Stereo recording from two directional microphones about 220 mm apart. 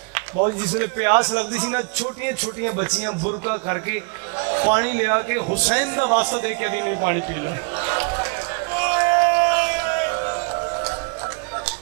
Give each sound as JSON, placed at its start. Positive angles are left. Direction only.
{"t": 0.7, "sound": "a man's voice", "side_deg": -15}
{"t": 8.7, "sound": "music", "side_deg": -15}